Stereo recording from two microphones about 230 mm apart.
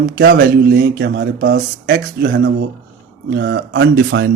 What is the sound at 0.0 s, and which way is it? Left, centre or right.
Speech, right.